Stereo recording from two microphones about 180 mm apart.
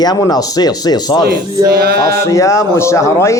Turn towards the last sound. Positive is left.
turn(degrees=15)  # may be behind; listen again after turning